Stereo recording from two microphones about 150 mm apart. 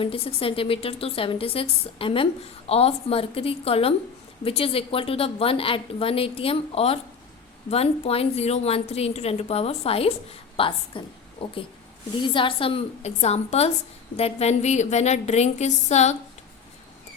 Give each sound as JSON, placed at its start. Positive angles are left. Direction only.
{"t": 0.0, "sound": "a woman's voice", "side_deg": 40}